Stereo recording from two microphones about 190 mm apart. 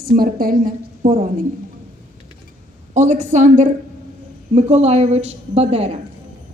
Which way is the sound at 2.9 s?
40° right (ahead or behind).